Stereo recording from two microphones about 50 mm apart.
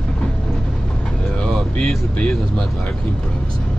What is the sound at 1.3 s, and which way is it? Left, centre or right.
Vehicle, centre.